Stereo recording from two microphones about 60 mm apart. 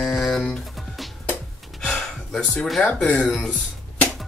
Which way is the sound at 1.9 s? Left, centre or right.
Centre.